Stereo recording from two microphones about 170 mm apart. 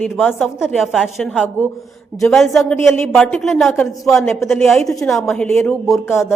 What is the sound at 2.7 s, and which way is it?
Speech, 15° left (ahead or behind).